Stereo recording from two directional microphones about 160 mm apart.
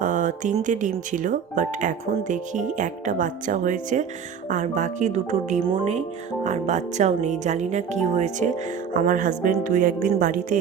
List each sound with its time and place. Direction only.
0.0 s speech: 50° right (ahead or behind)